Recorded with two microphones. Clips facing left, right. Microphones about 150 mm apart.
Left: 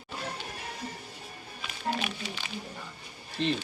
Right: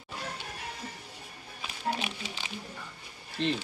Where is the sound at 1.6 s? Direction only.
25° right (ahead or behind).